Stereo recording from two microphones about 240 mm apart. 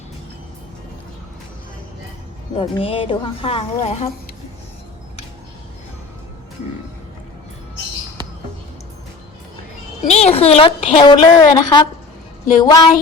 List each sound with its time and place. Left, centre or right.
2.6 s a woman's voice: left
10.1 s a woman's voice: left
12.6 s child singing: centre